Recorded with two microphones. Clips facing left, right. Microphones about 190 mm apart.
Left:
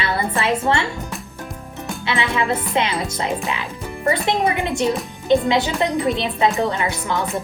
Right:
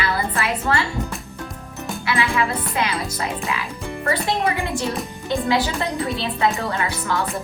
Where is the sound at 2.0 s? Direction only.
25° left (ahead or behind).